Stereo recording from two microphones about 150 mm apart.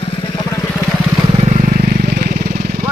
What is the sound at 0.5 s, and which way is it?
Vehicle, 10° left (ahead or behind).